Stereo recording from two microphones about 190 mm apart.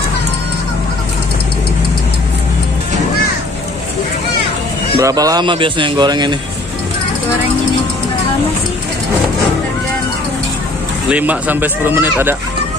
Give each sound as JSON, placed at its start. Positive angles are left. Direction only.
{"t": 4.9, "sound": "speech", "side_deg": -20}
{"t": 11.1, "sound": "speech", "side_deg": -10}